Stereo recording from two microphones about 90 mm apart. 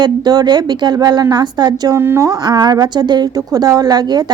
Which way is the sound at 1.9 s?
30° right (ahead or behind).